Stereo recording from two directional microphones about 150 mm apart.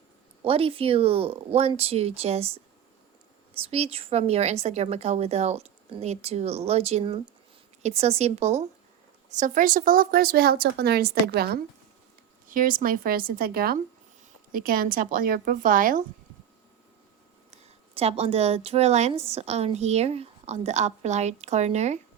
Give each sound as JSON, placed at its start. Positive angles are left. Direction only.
{"t": 0.4, "sound": "a woman's voice", "side_deg": -40}
{"t": 9.4, "sound": "a woman's voice", "side_deg": -65}
{"t": 12.5, "sound": "a woman's voice", "side_deg": -65}
{"t": 14.5, "sound": "a woman's voice", "side_deg": -75}
{"t": 17.9, "sound": "a woman's voice", "side_deg": -40}